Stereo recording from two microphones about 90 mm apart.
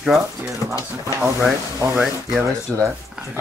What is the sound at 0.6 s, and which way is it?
Speech, 30° right (ahead or behind).